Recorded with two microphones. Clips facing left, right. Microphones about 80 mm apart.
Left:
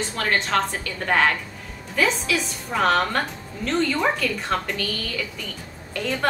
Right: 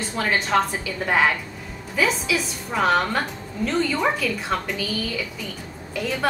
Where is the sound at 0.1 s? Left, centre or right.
Centre.